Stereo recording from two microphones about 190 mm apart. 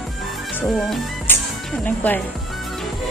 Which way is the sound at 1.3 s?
10° left (ahead or behind).